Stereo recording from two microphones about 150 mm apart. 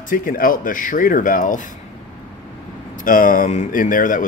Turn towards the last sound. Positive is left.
turn(degrees=60)  # may be behind; listen again after turning